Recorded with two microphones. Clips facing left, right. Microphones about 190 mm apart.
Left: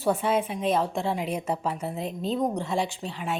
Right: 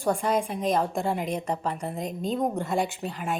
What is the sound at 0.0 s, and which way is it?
Speech, 5° left (ahead or behind).